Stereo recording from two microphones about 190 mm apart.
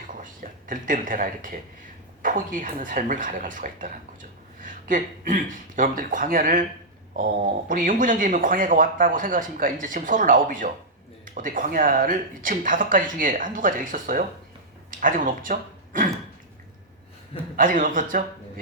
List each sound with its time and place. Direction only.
0.7 s speech: 45° right (ahead or behind)
17.6 s speech: 45° right (ahead or behind)